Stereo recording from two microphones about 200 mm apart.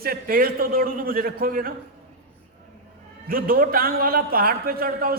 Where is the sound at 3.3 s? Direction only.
45° right (ahead or behind).